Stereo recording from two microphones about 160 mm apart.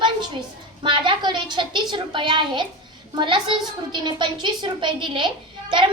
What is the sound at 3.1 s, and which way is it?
A woman's voice, 30° right (ahead or behind).